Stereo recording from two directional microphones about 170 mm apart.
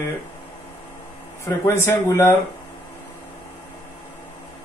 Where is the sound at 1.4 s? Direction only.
15° left (ahead or behind).